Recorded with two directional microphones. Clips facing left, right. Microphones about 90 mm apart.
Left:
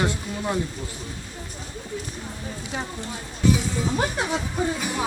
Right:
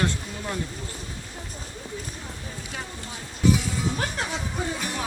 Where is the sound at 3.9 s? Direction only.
15° left (ahead or behind).